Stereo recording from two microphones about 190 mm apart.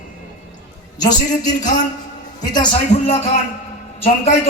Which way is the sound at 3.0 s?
35° left (ahead or behind).